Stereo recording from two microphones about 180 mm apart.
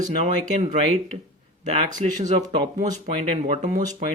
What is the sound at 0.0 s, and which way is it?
Speech, 40° right (ahead or behind).